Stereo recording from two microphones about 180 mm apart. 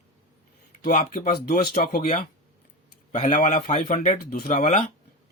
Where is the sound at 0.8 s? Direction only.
50° left (ahead or behind).